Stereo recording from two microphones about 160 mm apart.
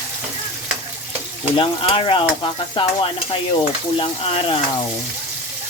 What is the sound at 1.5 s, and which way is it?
Stir, 35° left (ahead or behind).